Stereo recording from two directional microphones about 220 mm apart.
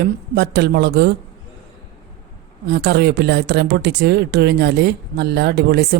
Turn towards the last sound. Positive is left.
turn(degrees=-45)  # may be behind; listen again after turning